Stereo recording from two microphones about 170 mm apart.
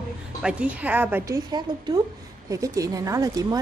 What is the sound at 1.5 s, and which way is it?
A woman's voice, 25° right (ahead or behind).